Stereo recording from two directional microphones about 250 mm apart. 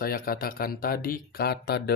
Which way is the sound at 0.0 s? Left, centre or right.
Left.